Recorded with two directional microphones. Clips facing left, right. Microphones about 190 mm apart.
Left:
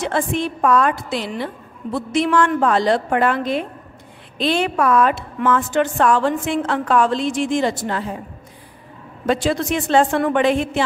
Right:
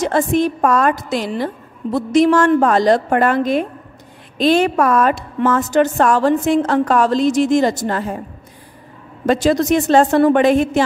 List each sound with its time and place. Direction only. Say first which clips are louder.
0.0 s a woman's voice: right 5 dB; 40° right (ahead or behind)
9.3 s a woman's voice: right 5 dB; 40° right (ahead or behind)